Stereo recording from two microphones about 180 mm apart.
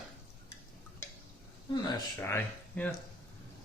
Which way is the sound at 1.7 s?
25° left (ahead or behind).